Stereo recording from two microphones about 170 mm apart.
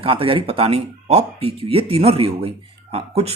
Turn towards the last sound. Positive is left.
turn(degrees=-35)  # may be behind; listen again after turning